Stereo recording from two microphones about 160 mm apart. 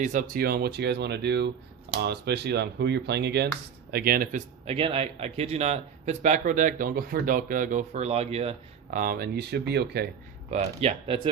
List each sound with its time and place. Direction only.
0.0 s speech: 55° right (ahead or behind); by 3.5 s 90° right
3.9 s a man's voice: 70° right (ahead or behind); by 8.5 s 40° right (ahead or behind)
8.9 s speech: 60° right (ahead or behind); by 10.1 s 90° right
10.5 s speech: 40° right (ahead or behind)